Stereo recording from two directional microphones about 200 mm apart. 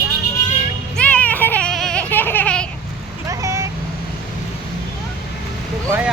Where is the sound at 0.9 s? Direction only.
5° left (ahead or behind).